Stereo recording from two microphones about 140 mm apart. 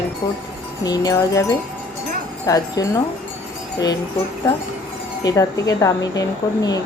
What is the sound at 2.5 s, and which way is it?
Speech, 25° left (ahead or behind).